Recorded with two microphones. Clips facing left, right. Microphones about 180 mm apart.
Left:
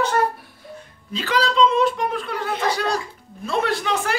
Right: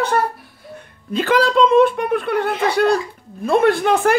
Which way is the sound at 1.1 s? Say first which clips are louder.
Right 6 dB; 55° right (ahead or behind).